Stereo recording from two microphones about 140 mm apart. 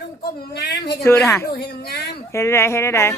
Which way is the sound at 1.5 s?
90° left.